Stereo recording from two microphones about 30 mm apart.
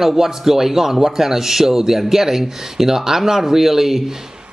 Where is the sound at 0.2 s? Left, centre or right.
Centre.